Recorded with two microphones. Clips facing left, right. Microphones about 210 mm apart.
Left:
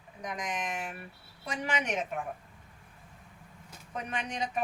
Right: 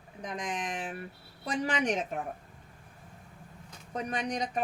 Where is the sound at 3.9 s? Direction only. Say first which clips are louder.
Right 4 dB; 40° right (ahead or behind).